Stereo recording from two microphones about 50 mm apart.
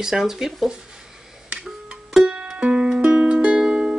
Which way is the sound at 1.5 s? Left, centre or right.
Centre.